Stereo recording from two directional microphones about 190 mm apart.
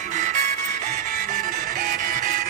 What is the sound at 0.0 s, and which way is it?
Music, 40° right (ahead or behind).